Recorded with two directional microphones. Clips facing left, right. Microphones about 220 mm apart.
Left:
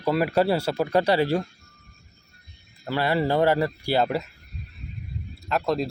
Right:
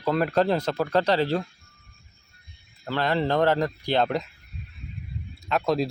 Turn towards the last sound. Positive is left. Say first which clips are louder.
# right 1 dB
turn(degrees=0)  # may be behind; listen again after turning